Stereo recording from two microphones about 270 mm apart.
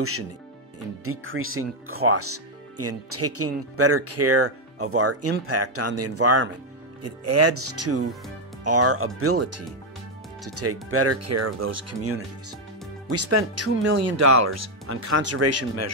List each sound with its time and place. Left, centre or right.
1.0 s speech: right
13.1 s speech: right
13.9 s speech: right